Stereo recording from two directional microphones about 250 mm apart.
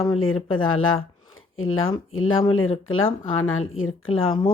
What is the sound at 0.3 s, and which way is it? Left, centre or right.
Speech, left.